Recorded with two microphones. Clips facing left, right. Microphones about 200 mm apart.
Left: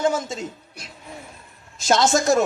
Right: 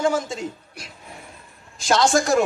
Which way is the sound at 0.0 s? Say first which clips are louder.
Even; 20° left (ahead or behind).